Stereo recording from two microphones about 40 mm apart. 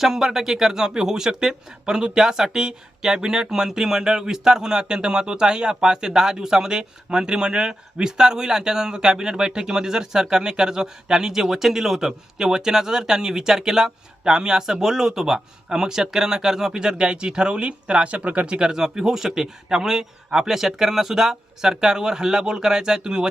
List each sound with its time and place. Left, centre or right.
0.0 s speech: centre; by 18.7 s right
18.7 s speech: centre